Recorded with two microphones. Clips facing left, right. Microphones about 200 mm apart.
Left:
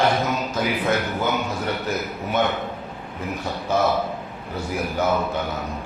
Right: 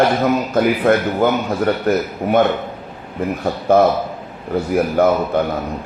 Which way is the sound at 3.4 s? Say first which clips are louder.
Right 8 dB; 55° right (ahead or behind).